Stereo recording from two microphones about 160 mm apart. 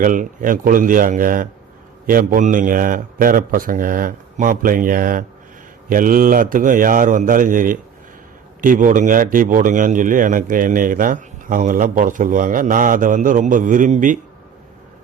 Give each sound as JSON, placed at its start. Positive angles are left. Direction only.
{"t": 0.0, "sound": "a man's voice", "side_deg": -55}